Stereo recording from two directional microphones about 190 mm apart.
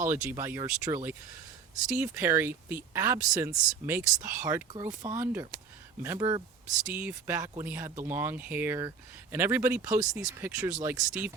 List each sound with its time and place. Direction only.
0.1 s speech: 10° right (ahead or behind)